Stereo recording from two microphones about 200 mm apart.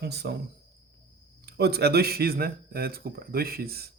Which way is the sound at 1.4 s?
55° right (ahead or behind).